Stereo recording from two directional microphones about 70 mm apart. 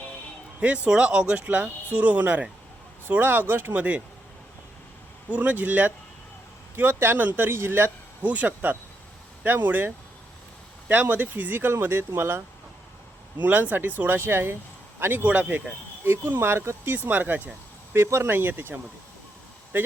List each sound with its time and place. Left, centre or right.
0.6 s speech: centre
5.3 s speech: right
8.2 s speech: right
13.4 s speech: right
16.0 s speech: right